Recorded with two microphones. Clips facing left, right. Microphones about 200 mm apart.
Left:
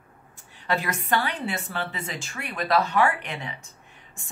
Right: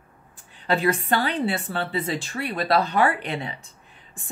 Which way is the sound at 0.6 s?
30° right (ahead or behind).